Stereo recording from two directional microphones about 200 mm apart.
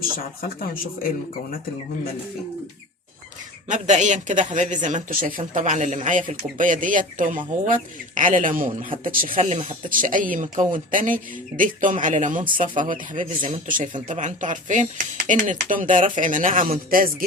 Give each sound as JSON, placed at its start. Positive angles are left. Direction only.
{"t": 0.2, "sound": "speech", "side_deg": 45}
{"t": 3.7, "sound": "speech", "side_deg": -35}